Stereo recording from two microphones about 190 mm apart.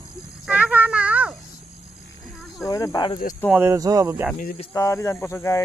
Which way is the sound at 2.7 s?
15° left (ahead or behind).